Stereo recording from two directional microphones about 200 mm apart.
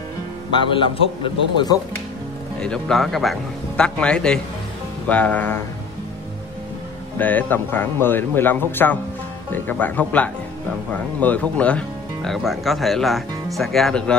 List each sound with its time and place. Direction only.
0.5 s a man's voice: 25° left (ahead or behind)
2.6 s a man's voice: 5° left (ahead or behind)
7.2 s a man's voice: 10° left (ahead or behind)